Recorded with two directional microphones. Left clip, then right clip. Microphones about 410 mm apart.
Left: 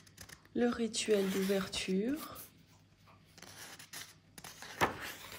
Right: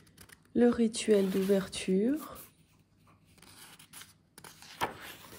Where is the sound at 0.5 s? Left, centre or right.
Centre.